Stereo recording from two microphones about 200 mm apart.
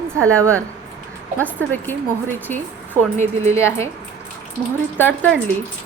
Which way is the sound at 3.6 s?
15° left (ahead or behind).